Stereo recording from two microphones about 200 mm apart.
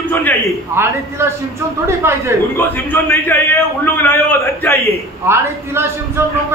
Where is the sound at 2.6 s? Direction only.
10° left (ahead or behind).